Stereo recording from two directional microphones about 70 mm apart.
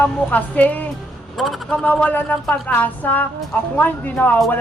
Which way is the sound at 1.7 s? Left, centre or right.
Left.